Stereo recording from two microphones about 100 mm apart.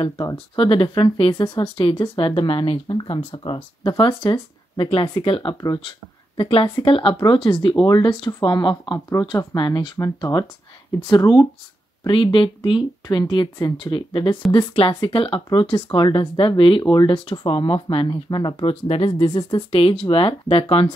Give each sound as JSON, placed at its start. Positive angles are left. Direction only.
{"t": 0.6, "sound": "speech", "side_deg": 60}
{"t": 4.0, "sound": "speech", "side_deg": 55}
{"t": 9.9, "sound": "speech", "side_deg": 35}
{"t": 11.1, "sound": "speech", "side_deg": 50}
{"t": 12.1, "sound": "speech", "side_deg": 60}
{"t": 13.0, "sound": "speech", "side_deg": 45}
{"t": 13.6, "sound": "speech", "side_deg": 40}
{"t": 13.9, "sound": "speech", "side_deg": 55}